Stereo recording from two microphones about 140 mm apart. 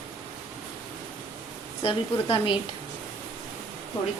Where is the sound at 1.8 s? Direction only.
40° left (ahead or behind).